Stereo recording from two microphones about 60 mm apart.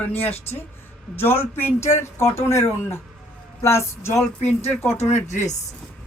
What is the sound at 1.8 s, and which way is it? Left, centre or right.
Speech, left.